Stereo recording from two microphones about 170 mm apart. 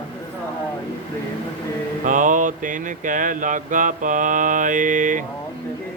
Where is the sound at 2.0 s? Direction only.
50° right (ahead or behind).